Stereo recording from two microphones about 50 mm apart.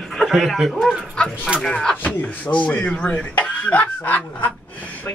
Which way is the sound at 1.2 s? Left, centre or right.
Centre.